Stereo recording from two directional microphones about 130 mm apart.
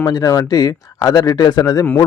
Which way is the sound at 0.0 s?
30° left (ahead or behind).